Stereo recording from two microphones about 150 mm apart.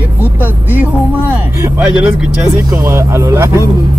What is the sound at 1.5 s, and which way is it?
Speech, 15° right (ahead or behind).